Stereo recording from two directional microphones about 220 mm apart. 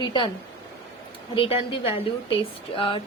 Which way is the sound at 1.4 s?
25° left (ahead or behind).